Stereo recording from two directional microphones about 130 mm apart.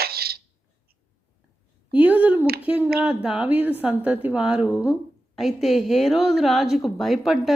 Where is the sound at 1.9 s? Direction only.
10° right (ahead or behind).